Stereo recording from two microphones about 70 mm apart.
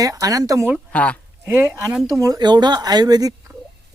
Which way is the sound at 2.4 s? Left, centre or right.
Right.